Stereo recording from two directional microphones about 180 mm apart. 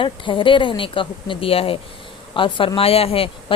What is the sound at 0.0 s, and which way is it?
A woman's voice, 30° left (ahead or behind).